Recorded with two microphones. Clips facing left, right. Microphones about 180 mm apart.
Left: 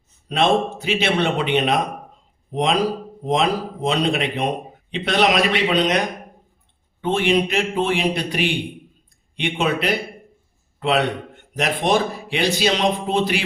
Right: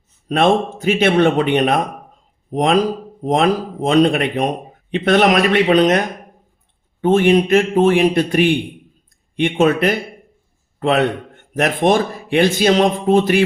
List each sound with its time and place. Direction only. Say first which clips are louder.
0.3 s a man's voice: right 3 dB; 50° right (ahead or behind)
7.0 s a man's voice: right 6 dB; 50° right (ahead or behind)